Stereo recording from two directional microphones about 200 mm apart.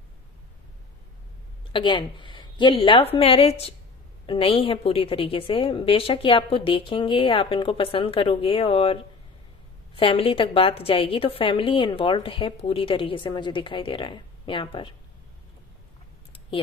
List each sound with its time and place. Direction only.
1.7 s a woman's voice: 25° left (ahead or behind)